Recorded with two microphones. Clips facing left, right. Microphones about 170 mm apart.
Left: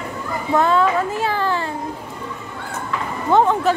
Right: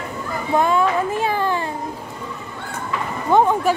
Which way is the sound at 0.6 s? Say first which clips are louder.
Left 1 dB; 15° right (ahead or behind).